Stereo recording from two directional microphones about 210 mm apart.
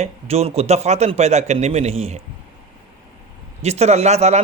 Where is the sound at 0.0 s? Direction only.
30° right (ahead or behind).